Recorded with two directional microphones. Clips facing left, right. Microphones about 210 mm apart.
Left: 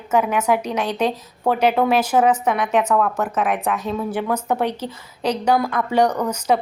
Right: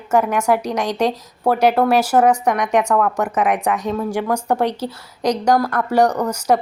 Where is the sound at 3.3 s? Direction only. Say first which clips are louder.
Right 3 dB; 15° right (ahead or behind).